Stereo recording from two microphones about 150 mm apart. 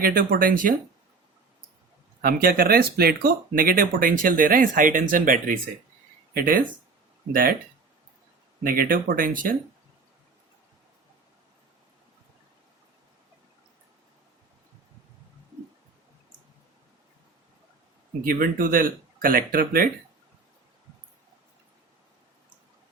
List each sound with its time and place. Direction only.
0.0 s speech: 70° right (ahead or behind)
2.2 s speech: 80° right
8.6 s speech: 70° right (ahead or behind)
18.3 s speech: 65° right (ahead or behind)